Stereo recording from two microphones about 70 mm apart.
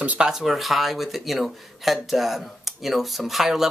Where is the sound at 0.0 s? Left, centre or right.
Centre.